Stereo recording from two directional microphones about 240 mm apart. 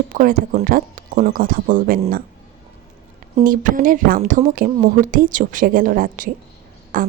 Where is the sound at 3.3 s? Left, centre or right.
Right.